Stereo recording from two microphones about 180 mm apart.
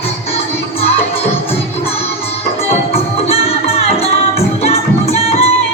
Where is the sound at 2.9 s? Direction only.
35° left (ahead or behind).